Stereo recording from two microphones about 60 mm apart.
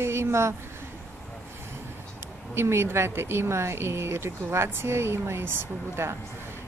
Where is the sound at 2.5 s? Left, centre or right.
Right.